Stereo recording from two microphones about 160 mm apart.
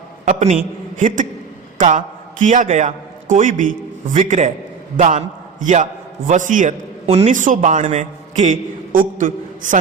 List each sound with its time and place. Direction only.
0.3 s a woman's voice: 45° right (ahead or behind)